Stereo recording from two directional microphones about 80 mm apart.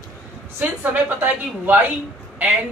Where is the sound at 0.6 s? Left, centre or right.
Right.